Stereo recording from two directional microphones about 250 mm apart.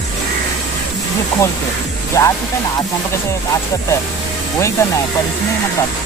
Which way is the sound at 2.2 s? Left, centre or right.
Centre.